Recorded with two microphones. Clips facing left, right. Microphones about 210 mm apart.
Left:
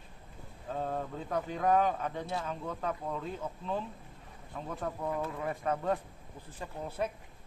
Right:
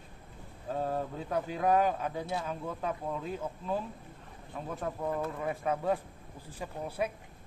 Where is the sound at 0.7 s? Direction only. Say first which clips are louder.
Right 2 dB; 5° right (ahead or behind).